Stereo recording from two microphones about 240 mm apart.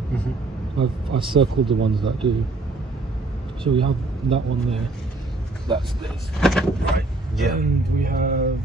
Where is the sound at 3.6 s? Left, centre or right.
Right.